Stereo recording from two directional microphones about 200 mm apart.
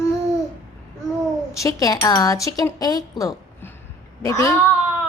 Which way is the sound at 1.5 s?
15° left (ahead or behind).